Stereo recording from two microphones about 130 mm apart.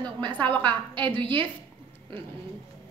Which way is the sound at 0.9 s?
40° right (ahead or behind).